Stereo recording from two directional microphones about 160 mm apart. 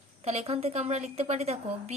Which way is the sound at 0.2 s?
40° right (ahead or behind).